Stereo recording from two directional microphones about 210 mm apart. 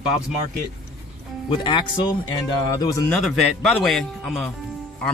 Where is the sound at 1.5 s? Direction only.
25° left (ahead or behind).